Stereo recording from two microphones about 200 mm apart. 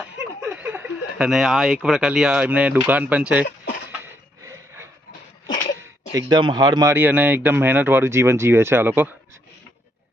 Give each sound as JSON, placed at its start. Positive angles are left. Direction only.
{"t": 0.0, "sound": "speech", "side_deg": -5}
{"t": 3.8, "sound": "a sound", "side_deg": -10}
{"t": 6.1, "sound": "speech", "side_deg": -20}
{"t": 6.9, "sound": "speech", "side_deg": -10}